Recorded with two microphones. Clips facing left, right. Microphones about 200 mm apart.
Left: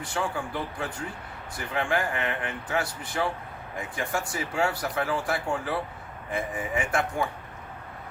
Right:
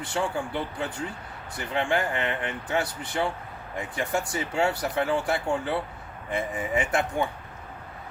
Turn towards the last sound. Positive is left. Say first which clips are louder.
# right 2 dB
turn(degrees=-25)  # may be behind; listen again after turning